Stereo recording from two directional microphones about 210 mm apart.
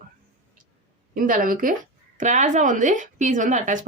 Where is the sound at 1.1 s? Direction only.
40° right (ahead or behind).